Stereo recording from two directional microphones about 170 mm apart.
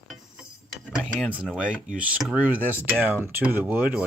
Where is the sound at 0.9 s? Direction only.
5° right (ahead or behind).